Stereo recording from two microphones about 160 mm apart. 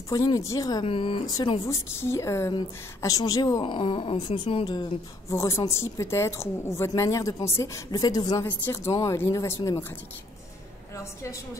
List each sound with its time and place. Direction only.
0.1 s a woman's voice: 25° left (ahead or behind)
0.8 s a woman's voice: 35° left (ahead or behind)
5.3 s a woman's voice: 20° left (ahead or behind)